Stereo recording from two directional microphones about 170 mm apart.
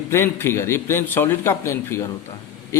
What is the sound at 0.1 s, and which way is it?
A man's voice, 15° left (ahead or behind).